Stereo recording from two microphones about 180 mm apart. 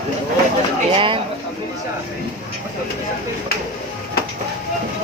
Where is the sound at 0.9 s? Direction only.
30° right (ahead or behind).